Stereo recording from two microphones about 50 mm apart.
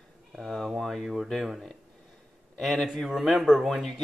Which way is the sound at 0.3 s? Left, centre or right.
Centre.